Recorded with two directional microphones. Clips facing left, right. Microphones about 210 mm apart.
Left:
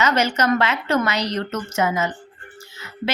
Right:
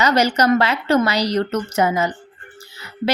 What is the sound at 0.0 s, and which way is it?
A woman's voice, 35° right (ahead or behind).